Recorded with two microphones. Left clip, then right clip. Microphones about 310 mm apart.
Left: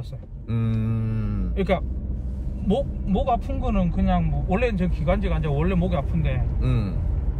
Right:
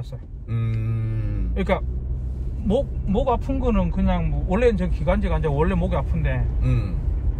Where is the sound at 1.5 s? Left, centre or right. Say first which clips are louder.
Even; centre.